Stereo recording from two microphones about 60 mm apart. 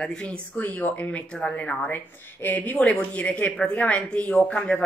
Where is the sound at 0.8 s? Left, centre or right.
Left.